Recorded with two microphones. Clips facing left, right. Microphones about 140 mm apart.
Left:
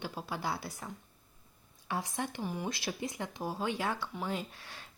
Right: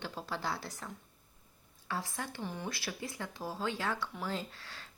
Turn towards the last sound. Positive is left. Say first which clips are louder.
# left 1 dB
turn(degrees=15)  # may be behind; listen again after turning